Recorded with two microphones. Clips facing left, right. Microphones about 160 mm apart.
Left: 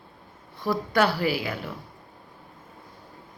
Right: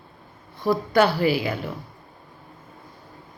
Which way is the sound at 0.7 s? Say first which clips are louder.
Right 4 dB; 25° right (ahead or behind).